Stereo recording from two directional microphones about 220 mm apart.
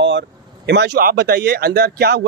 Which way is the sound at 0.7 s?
50° right (ahead or behind).